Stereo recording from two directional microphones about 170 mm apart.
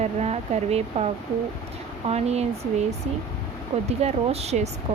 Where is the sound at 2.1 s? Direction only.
40° right (ahead or behind).